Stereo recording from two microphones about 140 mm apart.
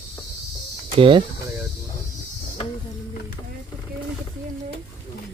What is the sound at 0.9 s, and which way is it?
Speech, 40° right (ahead or behind).